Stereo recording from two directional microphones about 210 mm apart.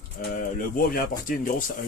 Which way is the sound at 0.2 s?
40° left (ahead or behind).